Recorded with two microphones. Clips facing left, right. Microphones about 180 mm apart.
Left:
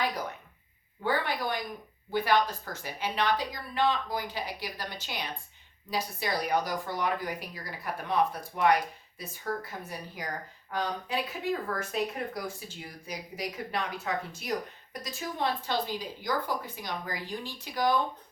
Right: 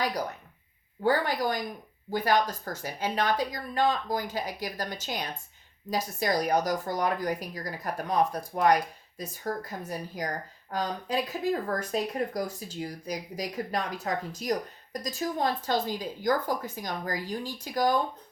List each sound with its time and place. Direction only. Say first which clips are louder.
1.0 s speech: right 4 dB; 40° right (ahead or behind)